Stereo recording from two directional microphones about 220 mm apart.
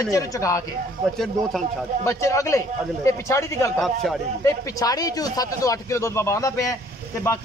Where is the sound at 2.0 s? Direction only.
15° left (ahead or behind).